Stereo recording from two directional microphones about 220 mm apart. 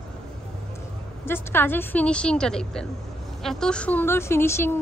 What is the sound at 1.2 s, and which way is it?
A woman's voice, 10° left (ahead or behind).